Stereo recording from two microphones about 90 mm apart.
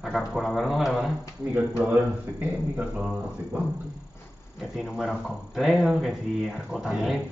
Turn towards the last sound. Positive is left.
turn(degrees=0)  # may be behind; listen again after turning